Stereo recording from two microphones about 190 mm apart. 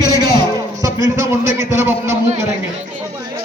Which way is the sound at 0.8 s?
15° right (ahead or behind).